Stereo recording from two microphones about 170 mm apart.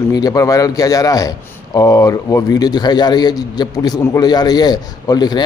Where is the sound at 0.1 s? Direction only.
20° left (ahead or behind).